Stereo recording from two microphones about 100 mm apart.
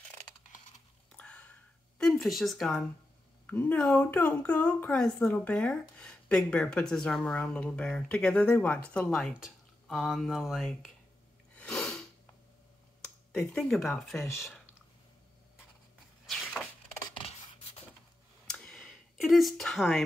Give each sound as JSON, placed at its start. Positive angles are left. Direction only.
{"t": 1.1, "sound": "whispering", "side_deg": 10}
{"t": 2.0, "sound": "speech", "side_deg": 5}
{"t": 3.4, "sound": "speech", "side_deg": 15}
{"t": 9.1, "sound": "speech", "side_deg": 5}
{"t": 11.5, "sound": "sneeze", "side_deg": 10}
{"t": 13.3, "sound": "speech", "side_deg": 5}
{"t": 17.1, "sound": "rub", "side_deg": 70}
{"t": 18.5, "sound": "a sound", "side_deg": 5}